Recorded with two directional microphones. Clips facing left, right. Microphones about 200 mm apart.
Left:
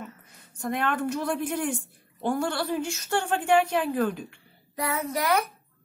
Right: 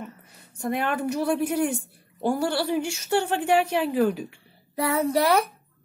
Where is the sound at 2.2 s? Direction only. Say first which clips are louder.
Right 3 dB; 10° right (ahead or behind).